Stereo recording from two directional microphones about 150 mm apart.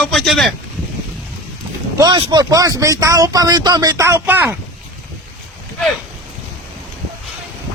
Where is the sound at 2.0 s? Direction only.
25° right (ahead or behind).